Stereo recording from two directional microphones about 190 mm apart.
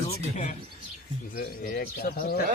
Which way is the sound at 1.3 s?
50° left (ahead or behind).